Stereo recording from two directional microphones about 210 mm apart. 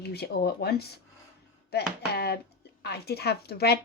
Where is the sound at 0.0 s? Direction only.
50° left (ahead or behind).